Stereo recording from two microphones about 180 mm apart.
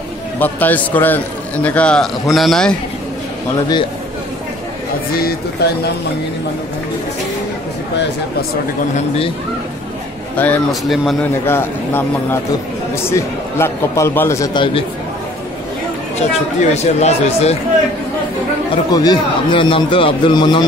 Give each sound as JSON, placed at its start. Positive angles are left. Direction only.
{"t": 0.4, "sound": "a man's voice", "side_deg": 10}
{"t": 5.6, "sound": "speech", "side_deg": 65}
{"t": 8.9, "sound": "speech", "side_deg": 35}
{"t": 10.3, "sound": "a man's voice", "side_deg": 10}
{"t": 16.2, "sound": "speech", "side_deg": 40}
{"t": 18.9, "sound": "a man's voice", "side_deg": 20}